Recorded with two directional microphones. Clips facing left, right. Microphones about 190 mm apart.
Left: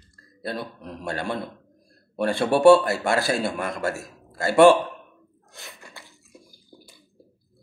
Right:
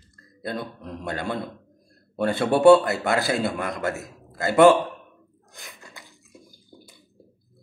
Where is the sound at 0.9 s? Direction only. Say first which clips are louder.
Left 1 dB; 20° right (ahead or behind).